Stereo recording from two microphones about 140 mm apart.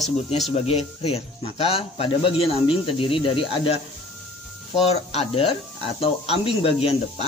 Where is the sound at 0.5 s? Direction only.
50° left (ahead or behind).